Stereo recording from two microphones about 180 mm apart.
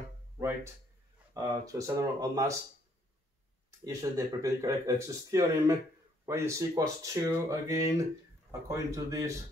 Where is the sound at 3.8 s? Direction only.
15° right (ahead or behind).